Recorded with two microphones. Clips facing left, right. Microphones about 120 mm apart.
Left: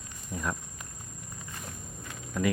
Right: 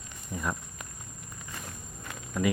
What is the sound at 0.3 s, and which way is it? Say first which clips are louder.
Speech: even; centre (ahead or behind).